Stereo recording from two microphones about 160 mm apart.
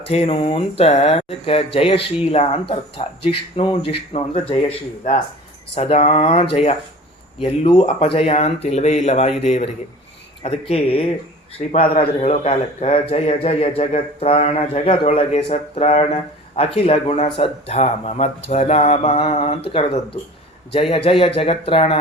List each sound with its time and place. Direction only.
0.1 s speech: 40° left (ahead or behind)
5.7 s a man's voice: 40° left (ahead or behind)
12.2 s speech: 40° left (ahead or behind)